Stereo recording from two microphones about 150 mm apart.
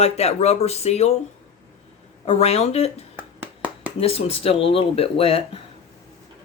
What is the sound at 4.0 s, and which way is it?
Speech, 40° left (ahead or behind).